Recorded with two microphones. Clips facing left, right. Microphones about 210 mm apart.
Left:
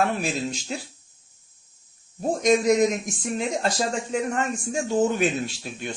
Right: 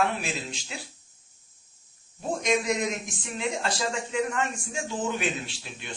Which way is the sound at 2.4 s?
45° left (ahead or behind).